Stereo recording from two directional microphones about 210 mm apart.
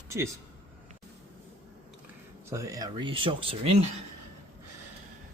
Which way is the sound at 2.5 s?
15° right (ahead or behind).